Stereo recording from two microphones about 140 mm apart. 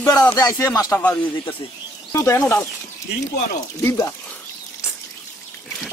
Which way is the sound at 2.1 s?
20° left (ahead or behind).